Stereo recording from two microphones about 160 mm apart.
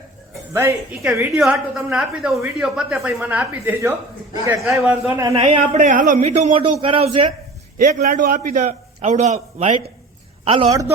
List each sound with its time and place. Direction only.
0.5 s speech: 15° right (ahead or behind)
1.1 s a woman's voice: centre (ahead or behind)
5.3 s a man's voice: 40° right (ahead or behind)
5.8 s a man's voice: 55° right (ahead or behind)
6.1 s a man's voice: 45° right (ahead or behind)
7.8 s a man's voice: 60° right (ahead or behind)
10.4 s a man's voice: 35° right (ahead or behind)
10.7 s a man's voice: 20° right (ahead or behind)